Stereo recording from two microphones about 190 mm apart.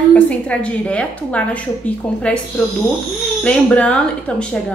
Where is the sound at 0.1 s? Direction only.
5° left (ahead or behind).